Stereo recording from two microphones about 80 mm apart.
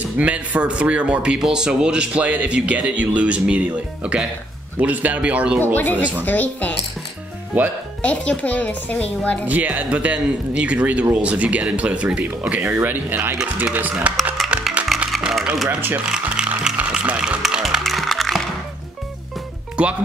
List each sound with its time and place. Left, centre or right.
0.0 s speech: centre
5.8 s speech: left
7.5 s speech: centre
8.0 s speech: centre
9.5 s speech: centre
13.4 s speech: centre
15.0 s music: centre
15.4 s a sound: centre
15.7 s speech: right
16.1 s music: centre
19.8 s speech: centre